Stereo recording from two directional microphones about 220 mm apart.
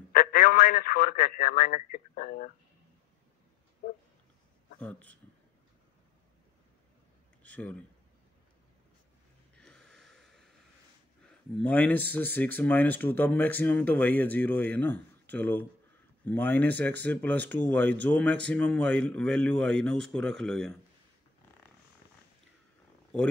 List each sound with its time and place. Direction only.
0.1 s a man's voice: 40° left (ahead or behind)
4.7 s a man's voice: 5° left (ahead or behind)
7.4 s speech: 5° left (ahead or behind)
9.6 s snort: 5° left (ahead or behind)
11.5 s a man's voice: 5° left (ahead or behind)